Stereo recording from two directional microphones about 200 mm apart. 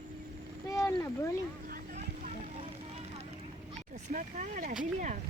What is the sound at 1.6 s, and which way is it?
Vehicle, 45° right (ahead or behind).